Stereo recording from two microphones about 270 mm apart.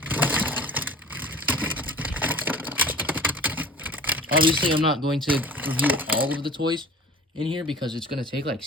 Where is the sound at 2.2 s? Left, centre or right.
Centre.